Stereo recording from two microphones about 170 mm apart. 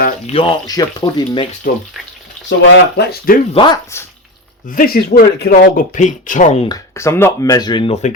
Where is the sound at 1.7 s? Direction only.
55° left (ahead or behind).